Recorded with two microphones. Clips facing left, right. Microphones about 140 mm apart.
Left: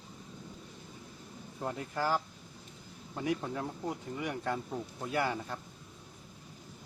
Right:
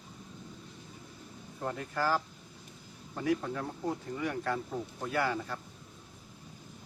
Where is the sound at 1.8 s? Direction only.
20° left (ahead or behind).